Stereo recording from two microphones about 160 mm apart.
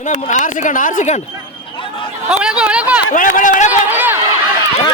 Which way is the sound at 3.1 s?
55° left (ahead or behind).